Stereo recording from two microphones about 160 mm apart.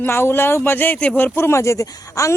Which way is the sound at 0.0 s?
15° left (ahead or behind).